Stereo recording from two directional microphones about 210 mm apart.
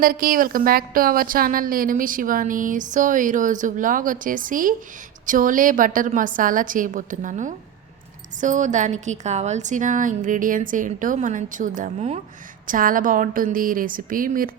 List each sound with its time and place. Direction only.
0.0 s a woman's voice: 45° right (ahead or behind)